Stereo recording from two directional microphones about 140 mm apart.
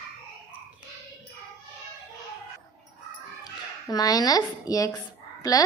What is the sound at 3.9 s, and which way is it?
A woman's voice, 25° left (ahead or behind).